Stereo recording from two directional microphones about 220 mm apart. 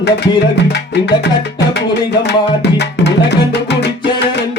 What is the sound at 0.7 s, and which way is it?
Music, 50° left (ahead or behind).